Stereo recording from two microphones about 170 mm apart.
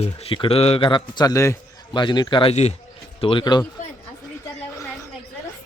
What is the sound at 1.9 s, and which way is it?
Speech, 30° left (ahead or behind).